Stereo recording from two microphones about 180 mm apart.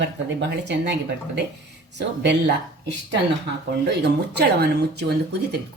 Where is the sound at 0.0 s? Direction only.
75° right (ahead or behind).